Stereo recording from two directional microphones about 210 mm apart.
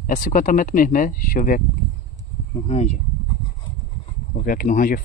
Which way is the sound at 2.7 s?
30° left (ahead or behind).